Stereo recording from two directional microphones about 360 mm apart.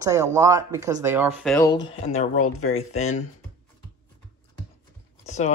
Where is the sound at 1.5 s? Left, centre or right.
Centre.